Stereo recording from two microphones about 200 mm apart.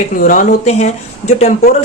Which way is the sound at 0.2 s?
40° left (ahead or behind).